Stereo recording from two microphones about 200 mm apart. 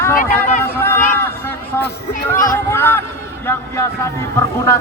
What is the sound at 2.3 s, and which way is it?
Speech, 15° left (ahead or behind).